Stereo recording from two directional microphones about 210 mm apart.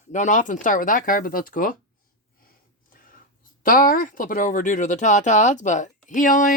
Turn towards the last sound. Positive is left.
turn(degrees=40)  # may be behind; listen again after turning